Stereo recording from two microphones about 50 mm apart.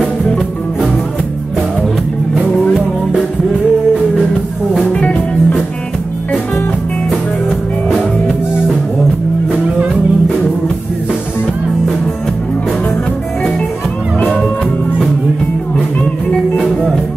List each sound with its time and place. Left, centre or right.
4.7 s music: left